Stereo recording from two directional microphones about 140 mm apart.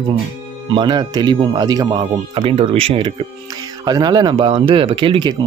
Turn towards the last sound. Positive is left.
turn(degrees=-35)  # may be behind; listen again after turning